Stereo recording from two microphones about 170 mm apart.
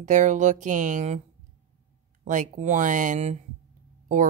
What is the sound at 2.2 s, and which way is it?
Speech, 45° right (ahead or behind).